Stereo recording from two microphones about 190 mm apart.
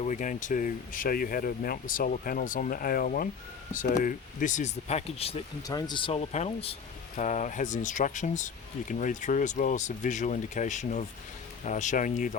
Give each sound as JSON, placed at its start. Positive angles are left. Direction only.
{"t": 0.0, "sound": "speech", "side_deg": 40}
{"t": 5.6, "sound": "speech", "side_deg": 20}